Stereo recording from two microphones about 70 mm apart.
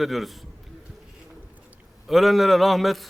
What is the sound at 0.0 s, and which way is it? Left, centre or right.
Speech, centre.